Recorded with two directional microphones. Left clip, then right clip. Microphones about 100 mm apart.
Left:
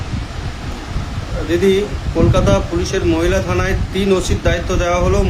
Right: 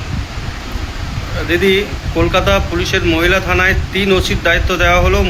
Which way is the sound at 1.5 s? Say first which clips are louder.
Right 2 dB; 20° left (ahead or behind).